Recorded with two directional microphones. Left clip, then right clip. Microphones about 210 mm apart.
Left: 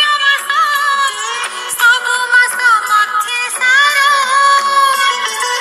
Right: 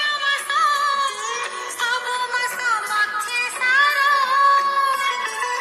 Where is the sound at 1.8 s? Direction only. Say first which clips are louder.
Left 12 dB; 30° left (ahead or behind).